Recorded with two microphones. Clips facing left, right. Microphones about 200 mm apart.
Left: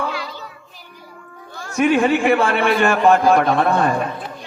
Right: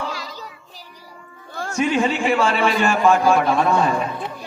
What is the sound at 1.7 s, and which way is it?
A man's voice, 55° left (ahead or behind).